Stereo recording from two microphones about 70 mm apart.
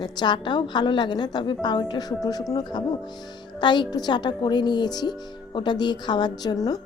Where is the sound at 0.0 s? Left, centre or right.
Left.